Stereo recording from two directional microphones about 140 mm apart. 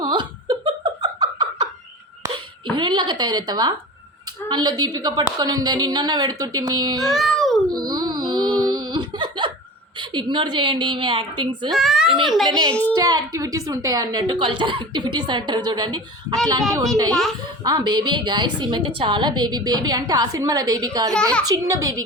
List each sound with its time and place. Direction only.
0.0 s giggle: 30° right (ahead or behind)
2.7 s a woman's voice: 35° right (ahead or behind)
7.0 s a sound: centre (ahead or behind)
7.9 s music: 30° right (ahead or behind)
8.6 s a sound: 30° right (ahead or behind)
10.0 s a woman's voice: 35° right (ahead or behind)
11.7 s a child's voice: centre (ahead or behind)
12.9 s a woman's voice: 30° right (ahead or behind)
17.6 s a woman's voice: 30° right (ahead or behind)
21.1 s a child's voice: 5° left (ahead or behind)
21.5 s a woman's voice: 25° right (ahead or behind)